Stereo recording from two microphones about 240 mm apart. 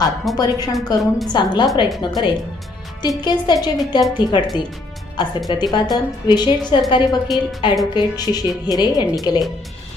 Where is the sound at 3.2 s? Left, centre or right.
Centre.